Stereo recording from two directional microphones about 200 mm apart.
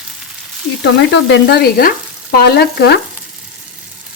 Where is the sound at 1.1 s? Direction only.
60° left (ahead or behind).